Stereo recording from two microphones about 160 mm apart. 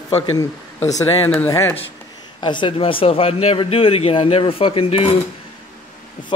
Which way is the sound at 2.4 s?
30° left (ahead or behind).